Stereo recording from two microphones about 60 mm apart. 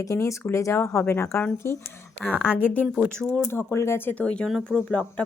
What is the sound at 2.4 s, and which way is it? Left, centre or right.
Speech, centre.